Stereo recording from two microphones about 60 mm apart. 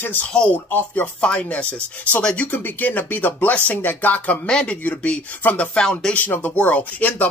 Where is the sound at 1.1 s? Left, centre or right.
Centre.